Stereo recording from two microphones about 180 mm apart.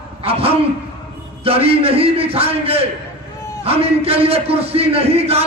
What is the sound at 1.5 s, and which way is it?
A man's voice, 30° right (ahead or behind).